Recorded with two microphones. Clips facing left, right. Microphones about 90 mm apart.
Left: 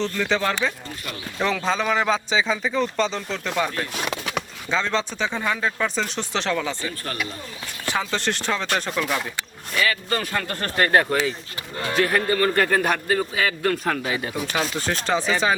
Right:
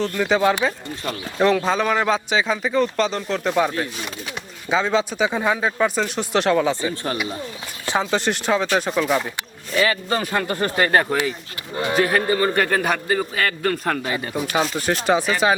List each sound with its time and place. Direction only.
0.0 s a man's voice: 10° right (ahead or behind)
3.9 s bird: 80° left
4.7 s a man's voice: 10° right (ahead or behind)
14.5 s speech: 10° right (ahead or behind)